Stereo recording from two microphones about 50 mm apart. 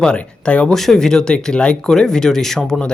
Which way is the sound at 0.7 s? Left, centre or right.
Centre.